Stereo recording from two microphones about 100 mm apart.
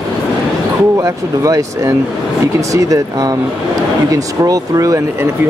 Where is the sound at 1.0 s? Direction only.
35° right (ahead or behind).